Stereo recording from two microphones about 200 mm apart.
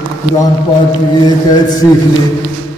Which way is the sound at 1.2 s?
20° left (ahead or behind).